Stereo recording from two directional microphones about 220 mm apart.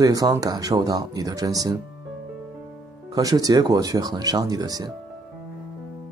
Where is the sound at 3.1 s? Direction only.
15° right (ahead or behind).